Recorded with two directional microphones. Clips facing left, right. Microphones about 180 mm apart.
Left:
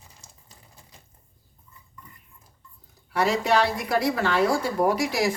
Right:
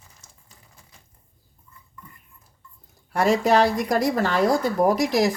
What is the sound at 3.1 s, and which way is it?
Speech, 45° right (ahead or behind).